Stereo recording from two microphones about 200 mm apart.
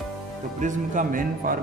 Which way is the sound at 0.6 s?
40° right (ahead or behind).